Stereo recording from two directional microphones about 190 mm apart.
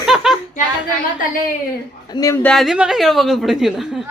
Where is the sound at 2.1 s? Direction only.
15° left (ahead or behind).